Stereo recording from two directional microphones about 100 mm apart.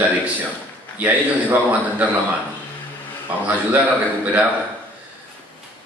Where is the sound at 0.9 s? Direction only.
15° right (ahead or behind).